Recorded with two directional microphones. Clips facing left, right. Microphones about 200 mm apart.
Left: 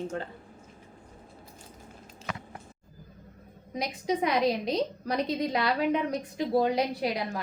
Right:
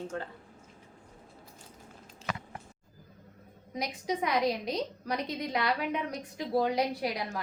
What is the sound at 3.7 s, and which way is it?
A woman's voice, 25° left (ahead or behind).